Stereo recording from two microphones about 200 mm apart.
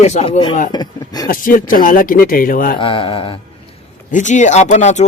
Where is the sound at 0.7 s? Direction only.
20° left (ahead or behind).